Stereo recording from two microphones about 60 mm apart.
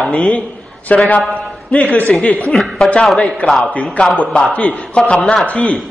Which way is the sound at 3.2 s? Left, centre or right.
Left.